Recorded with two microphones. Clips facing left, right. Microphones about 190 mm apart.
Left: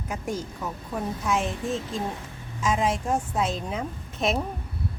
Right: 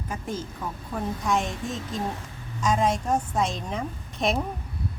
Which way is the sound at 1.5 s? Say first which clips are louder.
Left 3 dB; 35° left (ahead or behind).